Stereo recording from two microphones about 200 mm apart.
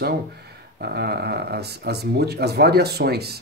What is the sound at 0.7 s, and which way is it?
Speech, 55° right (ahead or behind).